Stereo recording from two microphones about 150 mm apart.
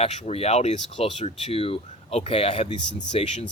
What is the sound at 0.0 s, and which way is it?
Speech, 40° left (ahead or behind).